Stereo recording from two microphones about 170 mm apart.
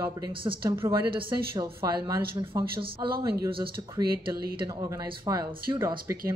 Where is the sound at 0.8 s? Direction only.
30° right (ahead or behind); by 2.7 s 15° right (ahead or behind).